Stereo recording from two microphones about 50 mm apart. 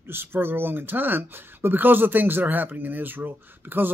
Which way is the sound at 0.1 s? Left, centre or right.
Right.